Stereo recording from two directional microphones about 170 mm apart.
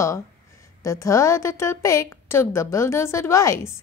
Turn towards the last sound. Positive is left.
turn(degrees=20)  # may be behind; listen again after turning